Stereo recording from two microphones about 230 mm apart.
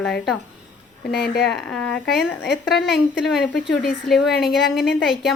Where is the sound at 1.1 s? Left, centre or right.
Left.